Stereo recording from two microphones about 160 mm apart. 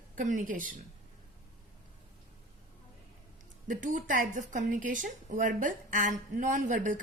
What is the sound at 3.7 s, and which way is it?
A woman's voice, 55° right (ahead or behind).